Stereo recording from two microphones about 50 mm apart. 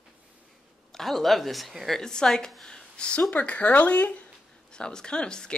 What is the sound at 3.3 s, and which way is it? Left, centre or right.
Speech, left.